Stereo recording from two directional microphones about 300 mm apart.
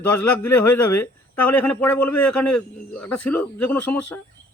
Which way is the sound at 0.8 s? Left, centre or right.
Left.